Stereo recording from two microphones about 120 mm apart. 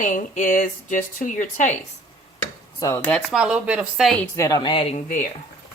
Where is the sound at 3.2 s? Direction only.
5° right (ahead or behind).